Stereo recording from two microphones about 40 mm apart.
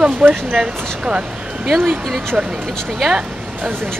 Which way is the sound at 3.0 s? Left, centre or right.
Centre.